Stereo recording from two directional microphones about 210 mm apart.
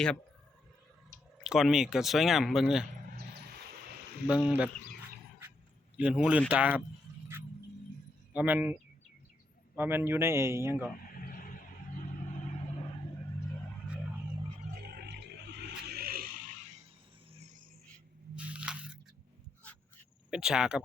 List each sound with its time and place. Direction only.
1.5 s speech: centre (ahead or behind)
4.4 s a man's voice: 5° right (ahead or behind)
6.0 s a man's voice: 5° right (ahead or behind)
8.3 s a man's voice: 5° right (ahead or behind)
11.1 s vehicle: 40° left (ahead or behind)
14.8 s a sound: 45° right (ahead or behind)
18.3 s a sound: 5° right (ahead or behind)
20.3 s speech: 5° right (ahead or behind)